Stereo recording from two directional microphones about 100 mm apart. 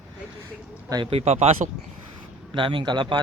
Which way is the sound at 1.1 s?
90° right.